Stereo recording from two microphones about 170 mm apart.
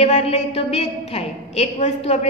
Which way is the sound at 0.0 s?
40° left (ahead or behind).